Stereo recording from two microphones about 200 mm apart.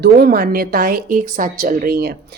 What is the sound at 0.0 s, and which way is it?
Speech, 50° right (ahead or behind).